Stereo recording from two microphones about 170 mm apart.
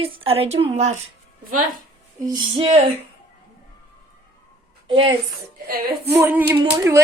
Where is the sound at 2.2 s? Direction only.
30° right (ahead or behind).